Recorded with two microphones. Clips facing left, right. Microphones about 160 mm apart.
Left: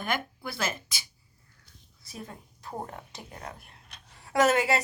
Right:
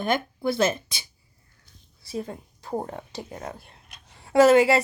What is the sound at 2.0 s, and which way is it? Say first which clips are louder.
A woman's voice: right 10 dB; 30° right (ahead or behind).